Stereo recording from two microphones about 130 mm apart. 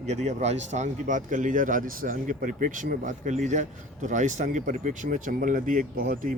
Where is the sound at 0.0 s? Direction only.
60° right (ahead or behind).